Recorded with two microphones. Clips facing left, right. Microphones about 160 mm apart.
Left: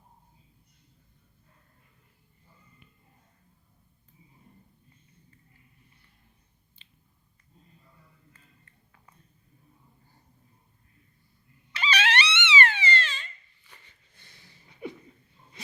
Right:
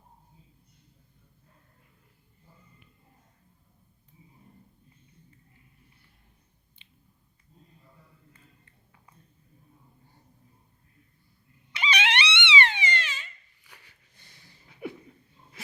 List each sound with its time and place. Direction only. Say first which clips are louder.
11.7 s wail: left 1 dB; 15° right (ahead or behind)